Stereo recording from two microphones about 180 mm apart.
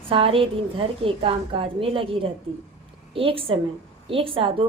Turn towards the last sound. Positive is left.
turn(degrees=-30)  # may be behind; listen again after turning